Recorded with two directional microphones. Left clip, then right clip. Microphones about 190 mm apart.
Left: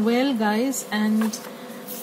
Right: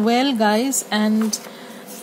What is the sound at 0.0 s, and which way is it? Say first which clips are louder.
Speech: right 4 dB; 55° right (ahead or behind).